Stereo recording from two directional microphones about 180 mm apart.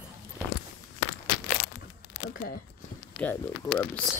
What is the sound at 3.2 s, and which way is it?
Speech, 10° left (ahead or behind).